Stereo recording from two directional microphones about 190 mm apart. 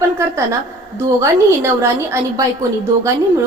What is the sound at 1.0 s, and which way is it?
A woman's voice, 15° right (ahead or behind).